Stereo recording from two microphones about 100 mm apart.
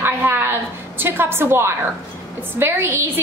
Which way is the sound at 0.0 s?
25° right (ahead or behind).